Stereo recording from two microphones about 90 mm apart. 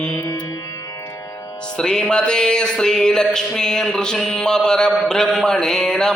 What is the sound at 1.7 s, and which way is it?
Music, 5° left (ahead or behind).